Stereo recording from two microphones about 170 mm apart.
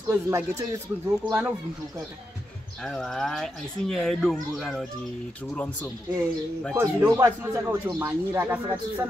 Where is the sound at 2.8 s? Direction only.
5° left (ahead or behind).